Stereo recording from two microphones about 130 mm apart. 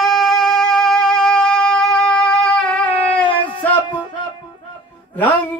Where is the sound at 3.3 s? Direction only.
40° left (ahead or behind).